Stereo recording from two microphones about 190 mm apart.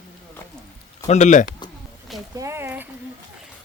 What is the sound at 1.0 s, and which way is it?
Speech, 40° left (ahead or behind).